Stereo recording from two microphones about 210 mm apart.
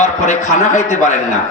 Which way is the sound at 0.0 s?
35° left (ahead or behind).